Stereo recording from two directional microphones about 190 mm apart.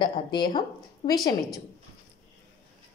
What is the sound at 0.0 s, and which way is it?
A woman's voice, 25° left (ahead or behind).